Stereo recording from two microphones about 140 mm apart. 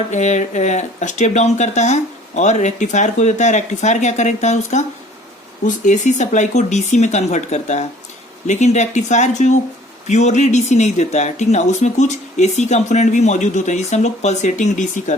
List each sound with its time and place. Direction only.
0.1 s speech: 60° left (ahead or behind)